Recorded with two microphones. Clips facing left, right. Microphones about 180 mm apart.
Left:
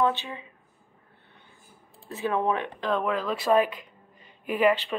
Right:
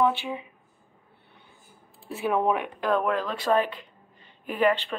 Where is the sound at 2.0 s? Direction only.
10° right (ahead or behind).